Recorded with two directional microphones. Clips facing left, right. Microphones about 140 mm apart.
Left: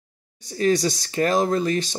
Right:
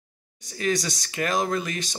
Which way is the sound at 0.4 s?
30° left (ahead or behind).